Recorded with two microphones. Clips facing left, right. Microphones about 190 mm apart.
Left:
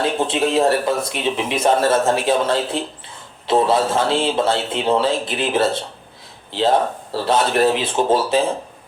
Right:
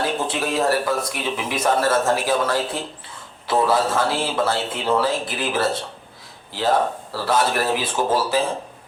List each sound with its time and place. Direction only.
0.0 s a man's voice: 25° left (ahead or behind)